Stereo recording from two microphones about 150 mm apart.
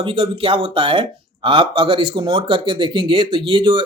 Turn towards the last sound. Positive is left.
turn(degrees=-35)  # may be behind; listen again after turning